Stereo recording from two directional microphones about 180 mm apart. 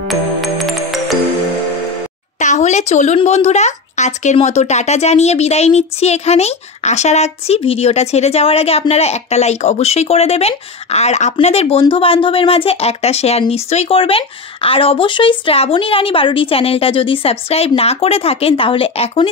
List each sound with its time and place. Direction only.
0.1 s music: centre (ahead or behind)
2.3 s speech: 40° left (ahead or behind)